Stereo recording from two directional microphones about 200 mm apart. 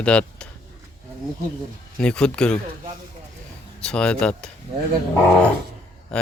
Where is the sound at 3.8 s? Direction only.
5° left (ahead or behind).